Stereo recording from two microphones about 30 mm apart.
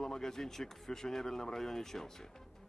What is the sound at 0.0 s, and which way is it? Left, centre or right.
Speech, centre.